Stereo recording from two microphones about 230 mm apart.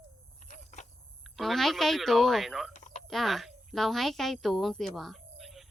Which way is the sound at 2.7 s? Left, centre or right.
Left.